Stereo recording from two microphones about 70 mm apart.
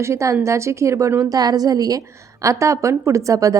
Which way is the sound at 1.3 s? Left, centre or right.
Right.